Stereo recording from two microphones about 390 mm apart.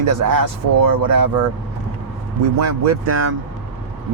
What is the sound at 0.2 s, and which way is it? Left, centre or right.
Speech, right.